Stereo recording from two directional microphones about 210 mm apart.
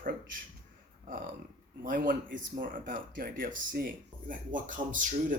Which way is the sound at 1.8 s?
40° right (ahead or behind).